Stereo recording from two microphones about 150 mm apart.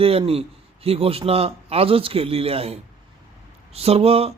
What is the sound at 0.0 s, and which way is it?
A man's voice, 40° right (ahead or behind).